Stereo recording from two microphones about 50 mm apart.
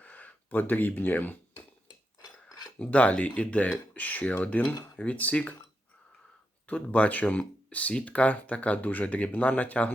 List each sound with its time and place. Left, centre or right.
0.0 s speech: left
2.7 s speech: left
6.7 s speech: left